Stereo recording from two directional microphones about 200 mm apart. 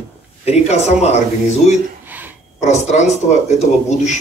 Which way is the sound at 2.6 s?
35° left (ahead or behind).